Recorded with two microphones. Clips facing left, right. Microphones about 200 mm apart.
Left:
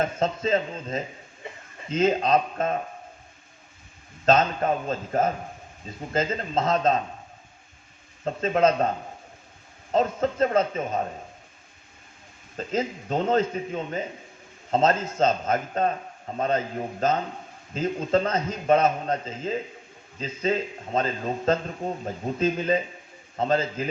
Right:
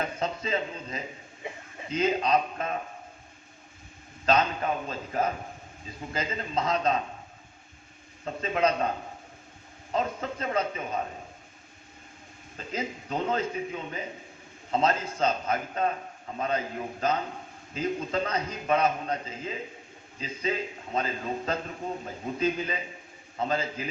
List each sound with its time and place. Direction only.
0.0 s a man's voice: 45° left (ahead or behind)
4.3 s a man's voice: 45° left (ahead or behind)
8.2 s a man's voice: 40° left (ahead or behind)
9.9 s a man's voice: 40° left (ahead or behind)
12.5 s a man's voice: 40° left (ahead or behind)